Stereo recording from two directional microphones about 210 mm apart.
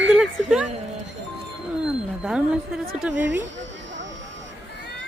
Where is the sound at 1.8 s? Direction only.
5° right (ahead or behind).